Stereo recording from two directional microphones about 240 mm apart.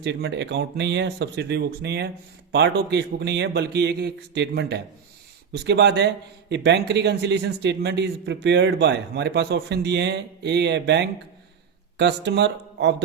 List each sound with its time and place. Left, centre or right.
0.0 s speech: right